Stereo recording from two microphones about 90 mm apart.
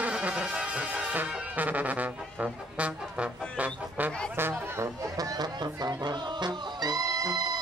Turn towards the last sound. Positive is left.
turn(degrees=-45)  # may be behind; listen again after turning